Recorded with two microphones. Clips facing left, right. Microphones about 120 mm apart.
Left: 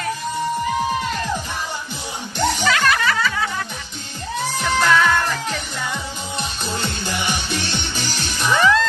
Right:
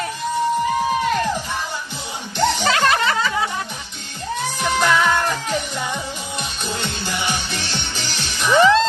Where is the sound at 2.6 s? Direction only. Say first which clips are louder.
Right 1 dB; 25° right (ahead or behind).